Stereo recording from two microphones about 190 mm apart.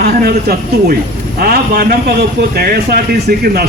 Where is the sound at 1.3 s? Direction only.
55° right (ahead or behind).